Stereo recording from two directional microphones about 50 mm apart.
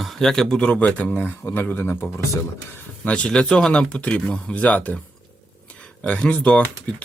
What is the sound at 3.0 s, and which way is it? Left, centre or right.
Speech, left.